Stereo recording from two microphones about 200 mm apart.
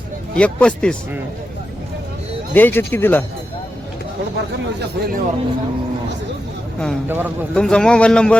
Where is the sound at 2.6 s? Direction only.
10° left (ahead or behind).